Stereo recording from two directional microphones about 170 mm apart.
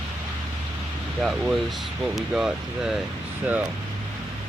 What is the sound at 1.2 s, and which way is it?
Speech, centre (ahead or behind).